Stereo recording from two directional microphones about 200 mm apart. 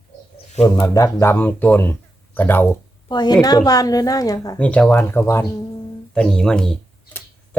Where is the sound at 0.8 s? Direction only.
15° left (ahead or behind).